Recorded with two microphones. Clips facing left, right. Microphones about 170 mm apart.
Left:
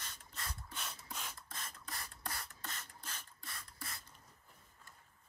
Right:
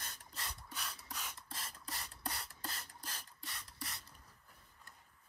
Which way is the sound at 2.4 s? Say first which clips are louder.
Right 1 dB; 35° right (ahead or behind).